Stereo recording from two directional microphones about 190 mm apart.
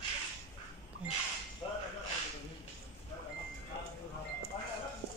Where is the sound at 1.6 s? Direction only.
30° left (ahead or behind).